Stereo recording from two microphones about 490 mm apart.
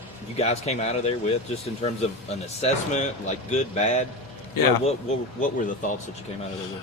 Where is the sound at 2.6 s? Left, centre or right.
Centre.